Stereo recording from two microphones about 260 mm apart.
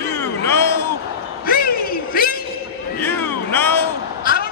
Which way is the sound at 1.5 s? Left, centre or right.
Left.